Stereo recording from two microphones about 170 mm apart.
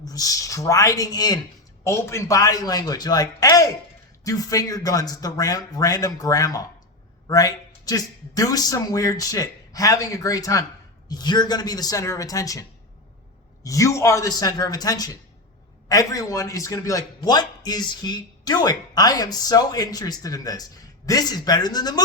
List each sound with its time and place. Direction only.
0.0 s a man's voice: 20° left (ahead or behind)
13.7 s a man's voice: 20° left (ahead or behind)